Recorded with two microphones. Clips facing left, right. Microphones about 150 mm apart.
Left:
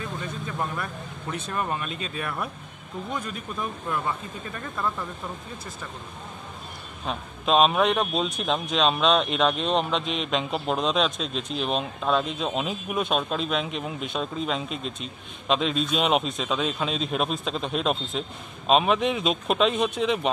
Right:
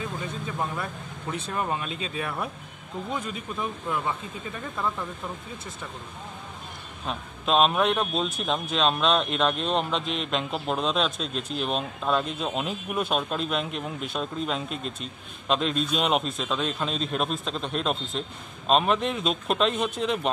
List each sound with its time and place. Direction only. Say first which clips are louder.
1.3 s speech: even; 25° right (ahead or behind)
7.1 s a man's voice: left 2 dB; centre (ahead or behind)